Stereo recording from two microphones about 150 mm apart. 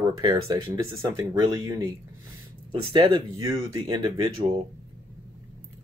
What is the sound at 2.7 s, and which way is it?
Speech, 35° right (ahead or behind).